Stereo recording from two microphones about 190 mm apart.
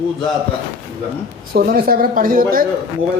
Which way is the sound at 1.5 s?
50° right (ahead or behind).